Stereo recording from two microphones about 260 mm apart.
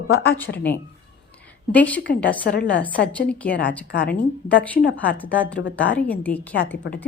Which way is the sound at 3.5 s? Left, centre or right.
Left.